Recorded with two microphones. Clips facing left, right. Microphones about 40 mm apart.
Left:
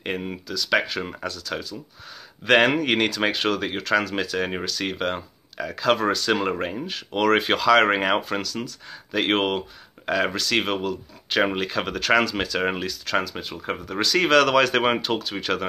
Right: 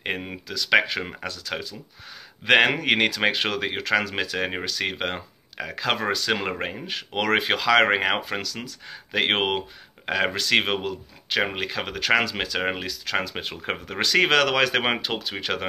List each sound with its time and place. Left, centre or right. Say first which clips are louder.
0.0 s speech: left 1 dB; centre
7.3 s speech: even; centre; by 11.0 s right
11.2 s speech: left 3 dB; centre
13.2 s speech: even; right
13.9 s speech: left 1 dB; right